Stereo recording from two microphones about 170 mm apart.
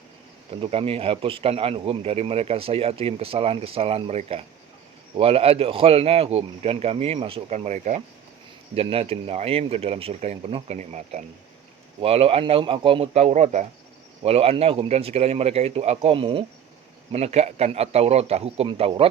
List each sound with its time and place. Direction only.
0.5 s speech: 35° right (ahead or behind)
8.7 s speech: 35° right (ahead or behind)